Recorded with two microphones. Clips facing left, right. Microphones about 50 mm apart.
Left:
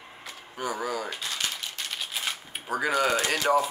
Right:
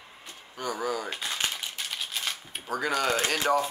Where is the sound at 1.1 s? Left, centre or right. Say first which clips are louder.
Right 1 dB; centre.